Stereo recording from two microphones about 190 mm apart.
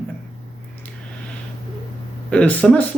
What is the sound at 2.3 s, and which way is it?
Speech, 5° left (ahead or behind).